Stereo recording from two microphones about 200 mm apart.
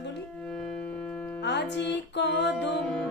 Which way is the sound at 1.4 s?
60° left (ahead or behind).